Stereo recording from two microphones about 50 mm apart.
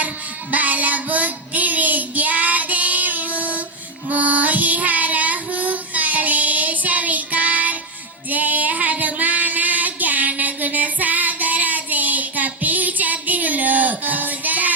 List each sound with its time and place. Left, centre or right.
0.5 s child singing: right
8.3 s female singing: right